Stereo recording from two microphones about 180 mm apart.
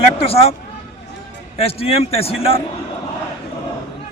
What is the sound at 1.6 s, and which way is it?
A man's voice, 30° left (ahead or behind).